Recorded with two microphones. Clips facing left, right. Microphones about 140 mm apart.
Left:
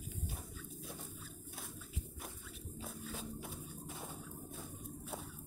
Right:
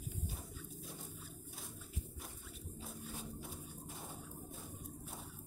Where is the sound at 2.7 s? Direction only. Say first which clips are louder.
Left 3 dB; 90° left.